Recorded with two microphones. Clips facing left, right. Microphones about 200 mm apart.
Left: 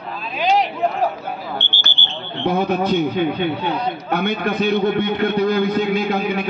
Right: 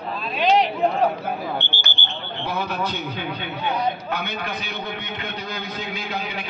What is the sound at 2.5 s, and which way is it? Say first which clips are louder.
A man's voice: left 9 dB; 55° left (ahead or behind).